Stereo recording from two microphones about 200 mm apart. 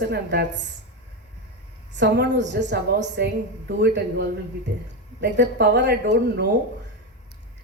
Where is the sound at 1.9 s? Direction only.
60° right (ahead or behind).